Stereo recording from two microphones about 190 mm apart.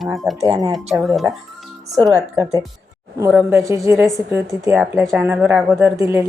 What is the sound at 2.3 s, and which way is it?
Speech, 15° right (ahead or behind).